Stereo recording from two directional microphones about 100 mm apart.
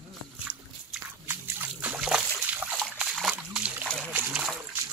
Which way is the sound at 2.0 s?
10° right (ahead or behind).